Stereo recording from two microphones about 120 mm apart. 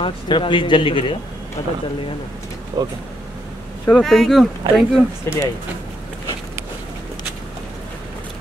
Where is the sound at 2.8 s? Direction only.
35° right (ahead or behind).